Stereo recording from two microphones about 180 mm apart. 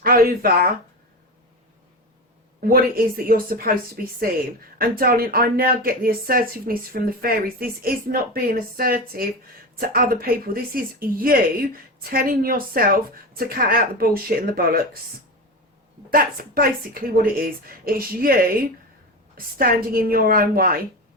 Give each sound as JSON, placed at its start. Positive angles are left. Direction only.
{"t": 0.0, "sound": "speech", "side_deg": -55}
{"t": 2.6, "sound": "speech", "side_deg": -55}
{"t": 16.0, "sound": "speech", "side_deg": -55}